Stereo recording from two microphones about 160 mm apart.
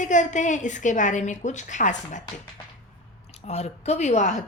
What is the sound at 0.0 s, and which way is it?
Speech, 50° left (ahead or behind).